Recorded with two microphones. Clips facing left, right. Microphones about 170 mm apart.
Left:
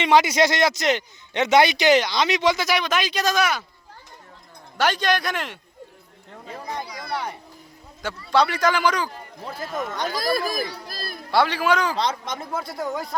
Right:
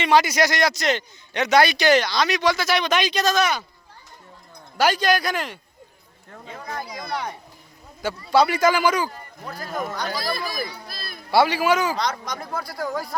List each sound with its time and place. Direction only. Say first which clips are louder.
0.0 s a man's voice: left 1 dB; 20° left (ahead or behind)
2.8 s speech: right 2 dB; 5° left (ahead or behind)
4.8 s speech: right 2 dB; centre (ahead or behind)
6.5 s a man's voice: left 1 dB; 25° left (ahead or behind)
6.8 s speech: even; 20° right (ahead or behind)
8.3 s speech: right 2 dB; 10° right (ahead or behind)
9.4 s a man's voice: left 2 dB; 25° left (ahead or behind)
10.1 s speech: left 4 dB; 45° left (ahead or behind)
11.3 s speech: right 2 dB; 10° right (ahead or behind)
11.9 s a man's voice: left 1 dB; 25° left (ahead or behind)